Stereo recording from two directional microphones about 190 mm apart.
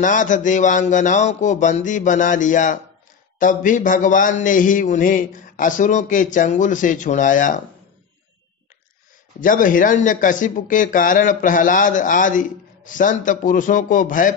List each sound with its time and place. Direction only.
0.0 s a man's voice: 40° left (ahead or behind)
9.4 s speech: 45° left (ahead or behind)